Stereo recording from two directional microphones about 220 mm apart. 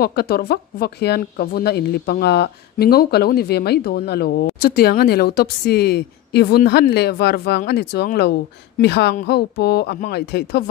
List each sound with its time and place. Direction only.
0.0 s speech: 45° left (ahead or behind)